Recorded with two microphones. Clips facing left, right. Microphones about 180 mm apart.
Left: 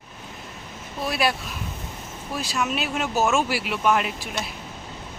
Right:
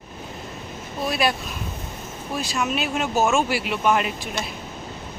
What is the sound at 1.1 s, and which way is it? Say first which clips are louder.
Speech: right 1 dB; 5° left (ahead or behind).